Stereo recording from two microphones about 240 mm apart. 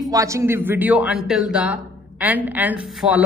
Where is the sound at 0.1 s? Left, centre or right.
Centre.